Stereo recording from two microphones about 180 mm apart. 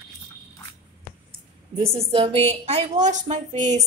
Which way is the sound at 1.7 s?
30° right (ahead or behind).